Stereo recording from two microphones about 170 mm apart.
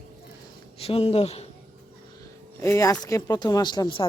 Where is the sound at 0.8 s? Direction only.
35° left (ahead or behind).